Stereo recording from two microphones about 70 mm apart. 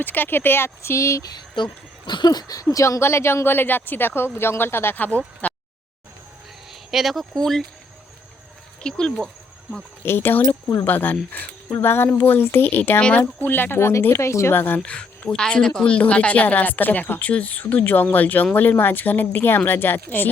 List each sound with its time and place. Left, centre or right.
0.0 s speech: left
2.0 s speech: left
6.9 s speech: centre
8.8 s speech: centre
10.0 s speech: left
13.0 s speech: centre
13.4 s speech: left
14.5 s speech: left
14.8 s speech: centre